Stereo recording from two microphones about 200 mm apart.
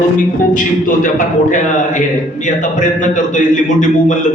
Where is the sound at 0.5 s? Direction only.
40° left (ahead or behind).